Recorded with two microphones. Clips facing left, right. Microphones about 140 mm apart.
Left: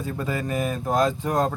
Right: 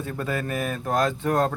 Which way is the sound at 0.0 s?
10° left (ahead or behind).